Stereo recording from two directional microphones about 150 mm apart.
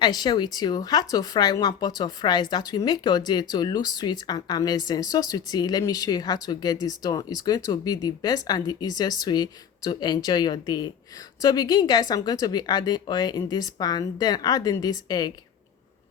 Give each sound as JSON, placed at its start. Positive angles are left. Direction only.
{"t": 0.0, "sound": "speech", "side_deg": 30}